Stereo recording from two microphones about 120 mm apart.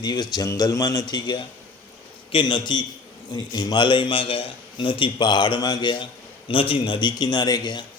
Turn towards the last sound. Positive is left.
turn(degrees=35)  # may be behind; listen again after turning